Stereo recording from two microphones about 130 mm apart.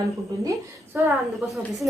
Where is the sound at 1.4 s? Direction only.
Centre (ahead or behind).